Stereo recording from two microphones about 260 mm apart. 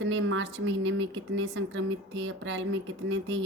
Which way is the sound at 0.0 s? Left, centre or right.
Right.